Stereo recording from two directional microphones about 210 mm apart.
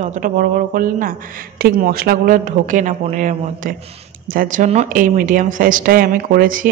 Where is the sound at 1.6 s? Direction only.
45° right (ahead or behind).